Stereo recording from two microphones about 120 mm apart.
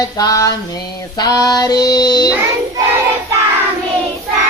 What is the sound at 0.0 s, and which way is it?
Female singing, 30° left (ahead or behind).